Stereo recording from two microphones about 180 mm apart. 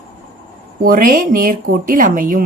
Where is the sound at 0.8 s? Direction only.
50° right (ahead or behind).